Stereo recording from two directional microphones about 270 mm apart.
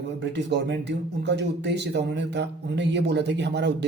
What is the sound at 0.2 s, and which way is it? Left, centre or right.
Speech, right.